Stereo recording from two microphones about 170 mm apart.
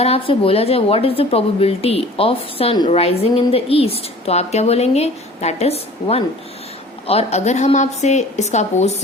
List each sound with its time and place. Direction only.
0.0 s a woman's voice: 35° left (ahead or behind)